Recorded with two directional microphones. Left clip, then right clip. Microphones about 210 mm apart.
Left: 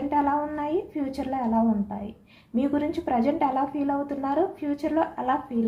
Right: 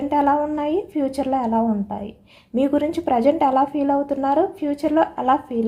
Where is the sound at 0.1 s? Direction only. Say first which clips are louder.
Right 6 dB; 45° right (ahead or behind).